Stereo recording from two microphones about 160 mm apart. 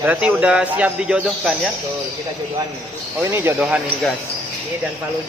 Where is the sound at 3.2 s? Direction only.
15° right (ahead or behind).